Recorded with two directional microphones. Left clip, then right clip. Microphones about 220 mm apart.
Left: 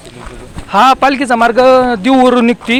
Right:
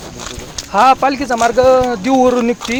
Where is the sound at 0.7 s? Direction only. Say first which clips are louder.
Left 3 dB; 45° left (ahead or behind).